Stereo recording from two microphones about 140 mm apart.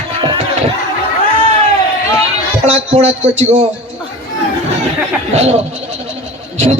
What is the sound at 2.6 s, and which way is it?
Speech, 50° right (ahead or behind).